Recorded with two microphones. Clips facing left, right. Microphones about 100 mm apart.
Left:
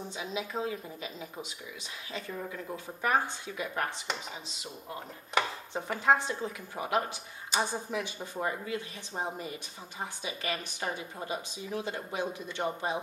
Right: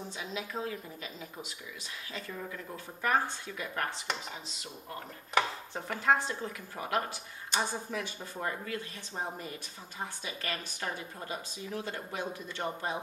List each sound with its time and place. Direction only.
0.2 s speech: 15° left (ahead or behind)
4.9 s speech: 5° left (ahead or behind)